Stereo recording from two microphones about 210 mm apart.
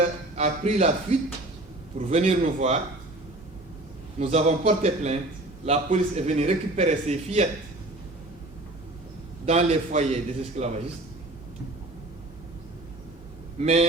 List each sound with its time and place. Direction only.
0.0 s a man's voice: 30° right (ahead or behind)
2.0 s a man's voice: 30° right (ahead or behind)
4.2 s a man's voice: 30° right (ahead or behind)
9.5 s a man's voice: 30° right (ahead or behind)
13.6 s a man's voice: 30° right (ahead or behind)